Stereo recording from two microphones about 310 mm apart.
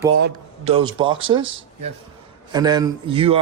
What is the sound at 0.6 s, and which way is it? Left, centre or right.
A man's voice, centre.